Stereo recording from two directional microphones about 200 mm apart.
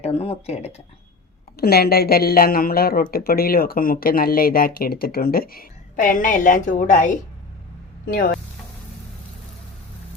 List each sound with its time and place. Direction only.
0.0 s speech: 30° left (ahead or behind)
1.5 s speech: 50° left (ahead or behind)